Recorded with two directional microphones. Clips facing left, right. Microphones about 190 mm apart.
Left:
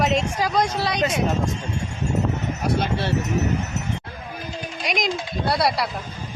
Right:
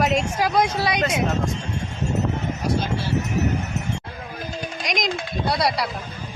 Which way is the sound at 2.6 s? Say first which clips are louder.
Left 2 dB; 65° left (ahead or behind).